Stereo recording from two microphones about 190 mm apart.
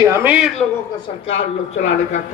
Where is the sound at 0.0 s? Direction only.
10° right (ahead or behind).